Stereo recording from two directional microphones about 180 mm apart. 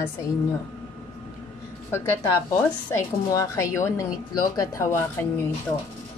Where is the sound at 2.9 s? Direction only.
15° left (ahead or behind).